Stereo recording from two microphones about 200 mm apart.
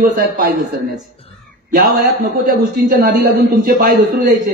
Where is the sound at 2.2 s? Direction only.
45° right (ahead or behind).